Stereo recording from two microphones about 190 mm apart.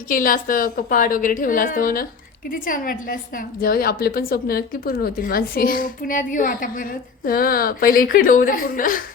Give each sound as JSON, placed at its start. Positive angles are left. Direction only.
{"t": 0.1, "sound": "a woman's voice", "side_deg": 45}